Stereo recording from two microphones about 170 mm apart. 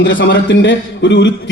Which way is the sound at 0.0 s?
90° left.